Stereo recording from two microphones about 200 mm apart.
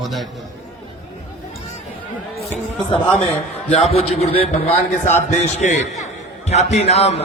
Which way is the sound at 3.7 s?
30° left (ahead or behind).